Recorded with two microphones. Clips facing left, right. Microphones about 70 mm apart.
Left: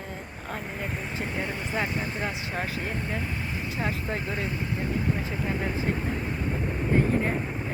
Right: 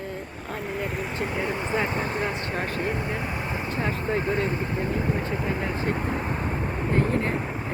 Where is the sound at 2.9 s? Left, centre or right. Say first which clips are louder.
Right 3 dB; centre.